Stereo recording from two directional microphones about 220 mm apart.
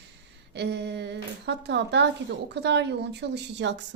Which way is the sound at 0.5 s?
50° right (ahead or behind).